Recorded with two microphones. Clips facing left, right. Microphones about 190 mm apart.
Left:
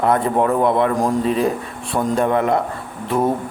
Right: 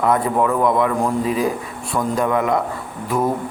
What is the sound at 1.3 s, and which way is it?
Speech, 10° right (ahead or behind).